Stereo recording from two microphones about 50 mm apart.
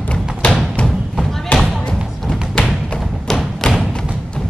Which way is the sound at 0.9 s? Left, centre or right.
Centre.